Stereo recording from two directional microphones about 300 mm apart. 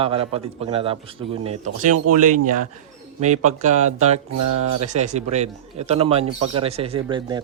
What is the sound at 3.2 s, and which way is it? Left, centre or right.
Speech, right.